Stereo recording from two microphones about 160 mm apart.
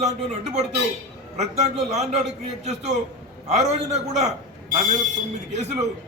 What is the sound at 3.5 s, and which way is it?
Speech, 45° right (ahead or behind).